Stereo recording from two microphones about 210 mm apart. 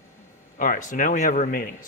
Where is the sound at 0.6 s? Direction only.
40° left (ahead or behind).